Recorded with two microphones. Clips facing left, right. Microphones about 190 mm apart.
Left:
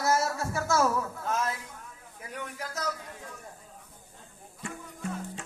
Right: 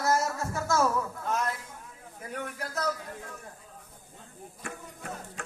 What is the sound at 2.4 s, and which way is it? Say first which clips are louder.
Speech: right 2 dB; 50° right (ahead or behind).